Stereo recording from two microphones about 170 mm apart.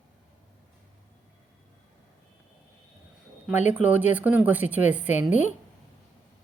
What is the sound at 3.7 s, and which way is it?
A woman's voice, 10° right (ahead or behind).